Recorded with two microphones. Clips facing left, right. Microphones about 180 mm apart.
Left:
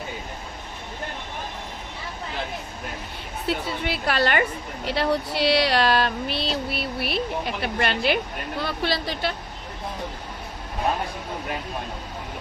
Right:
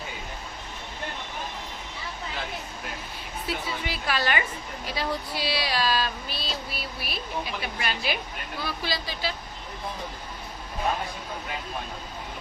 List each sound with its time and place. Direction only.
3.4 s speech: 65° left (ahead or behind)
4.9 s speech: 70° left (ahead or behind)